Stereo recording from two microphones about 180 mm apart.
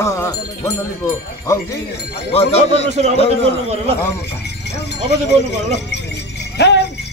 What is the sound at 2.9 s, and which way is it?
Speech, 40° right (ahead or behind).